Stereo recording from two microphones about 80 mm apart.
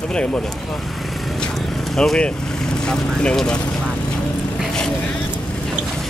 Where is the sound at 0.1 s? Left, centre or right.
Centre.